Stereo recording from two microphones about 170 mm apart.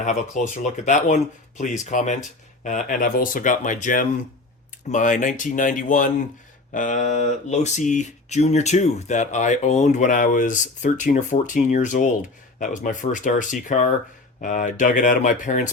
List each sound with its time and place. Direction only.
0.0 s speech: 45° left (ahead or behind)